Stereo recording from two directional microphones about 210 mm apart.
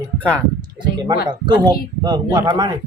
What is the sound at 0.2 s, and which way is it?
Speech, 5° left (ahead or behind).